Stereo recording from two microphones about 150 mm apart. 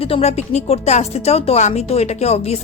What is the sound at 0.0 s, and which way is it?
A woman's voice, 45° left (ahead or behind).